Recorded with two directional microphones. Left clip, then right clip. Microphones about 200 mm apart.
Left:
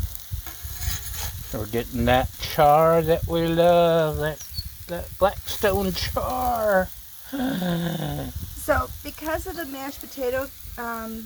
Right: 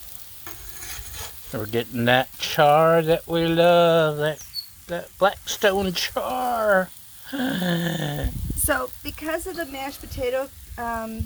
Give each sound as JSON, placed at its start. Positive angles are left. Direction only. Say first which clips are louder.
{"t": 1.5, "sound": "speech", "louder": "right 2 dB", "side_deg": 0}
{"t": 8.6, "sound": "speech", "louder": "left 1 dB", "side_deg": 35}